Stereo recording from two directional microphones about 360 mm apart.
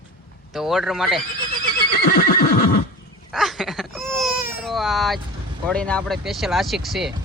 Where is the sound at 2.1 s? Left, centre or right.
Left.